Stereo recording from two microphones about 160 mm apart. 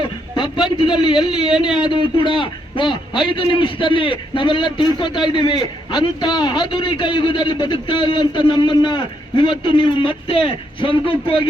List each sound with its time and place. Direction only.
0.0 s a sound: 30° left (ahead or behind)
1.3 s speech: 5° right (ahead or behind)
1.8 s a man's voice: 30° left (ahead or behind)